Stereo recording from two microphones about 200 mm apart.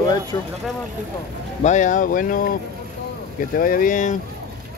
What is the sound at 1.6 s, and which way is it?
Speech, 40° left (ahead or behind).